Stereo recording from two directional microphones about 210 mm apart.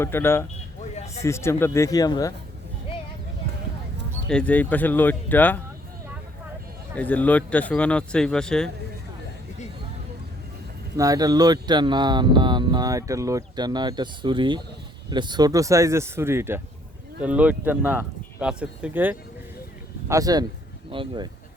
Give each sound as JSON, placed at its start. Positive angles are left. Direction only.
{"t": 0.0, "sound": "speech", "side_deg": 10}
{"t": 0.9, "sound": "a sound", "side_deg": 30}
{"t": 1.2, "sound": "speech", "side_deg": 15}
{"t": 4.3, "sound": "speech", "side_deg": 5}
{"t": 6.9, "sound": "speech", "side_deg": 5}
{"t": 10.9, "sound": "speech", "side_deg": -15}